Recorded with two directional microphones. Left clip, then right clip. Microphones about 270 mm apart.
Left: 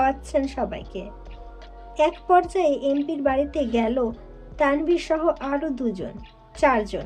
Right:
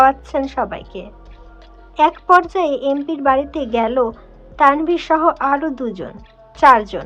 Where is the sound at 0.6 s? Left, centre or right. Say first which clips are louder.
Right 6 dB; right.